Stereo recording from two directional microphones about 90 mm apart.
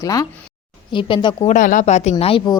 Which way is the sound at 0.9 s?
65° left (ahead or behind).